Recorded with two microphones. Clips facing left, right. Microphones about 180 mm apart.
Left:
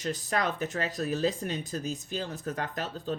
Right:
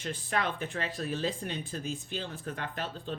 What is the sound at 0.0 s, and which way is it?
Speech, 40° left (ahead or behind).